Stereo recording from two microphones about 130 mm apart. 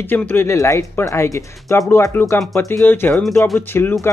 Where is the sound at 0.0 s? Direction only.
15° left (ahead or behind).